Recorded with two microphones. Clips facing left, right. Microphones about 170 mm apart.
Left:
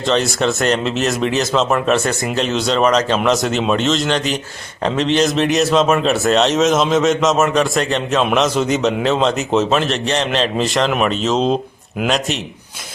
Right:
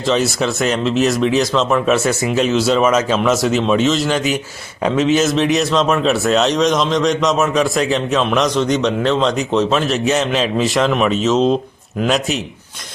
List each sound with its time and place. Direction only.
0.1 s speech: centre (ahead or behind)